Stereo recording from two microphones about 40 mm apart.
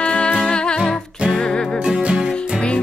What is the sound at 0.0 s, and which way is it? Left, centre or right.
Music, left.